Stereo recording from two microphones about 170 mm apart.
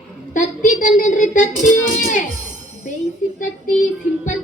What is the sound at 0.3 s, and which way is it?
Speech, 50° left (ahead or behind).